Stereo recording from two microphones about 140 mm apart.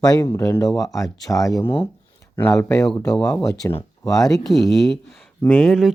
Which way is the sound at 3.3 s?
25° left (ahead or behind).